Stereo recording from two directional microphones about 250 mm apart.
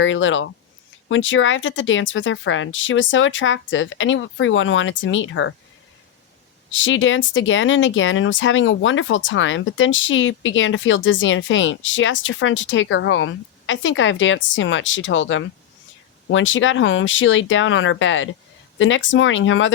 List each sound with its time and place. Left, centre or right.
0.0 s speech: left
6.7 s speech: left